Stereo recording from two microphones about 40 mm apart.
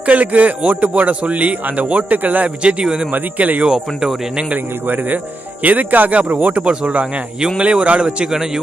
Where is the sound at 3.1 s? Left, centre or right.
Right.